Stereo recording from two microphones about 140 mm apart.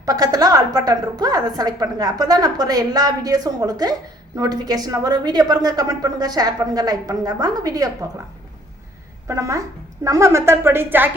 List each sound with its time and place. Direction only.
0.0 s a woman's voice: 25° right (ahead or behind)
9.2 s a woman's voice: 20° right (ahead or behind)